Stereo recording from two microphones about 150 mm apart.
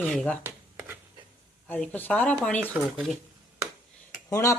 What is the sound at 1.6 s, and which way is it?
Speech, 10° left (ahead or behind).